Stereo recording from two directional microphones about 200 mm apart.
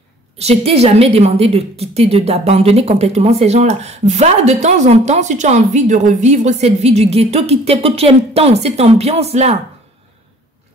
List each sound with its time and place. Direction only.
0.4 s a woman's voice: 30° right (ahead or behind)